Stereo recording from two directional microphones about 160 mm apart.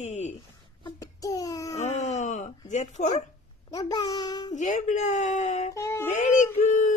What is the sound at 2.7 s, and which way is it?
Speech, 50° left (ahead or behind).